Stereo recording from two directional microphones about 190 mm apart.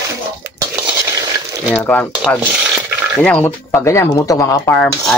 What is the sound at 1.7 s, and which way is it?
Speech, 5° left (ahead or behind).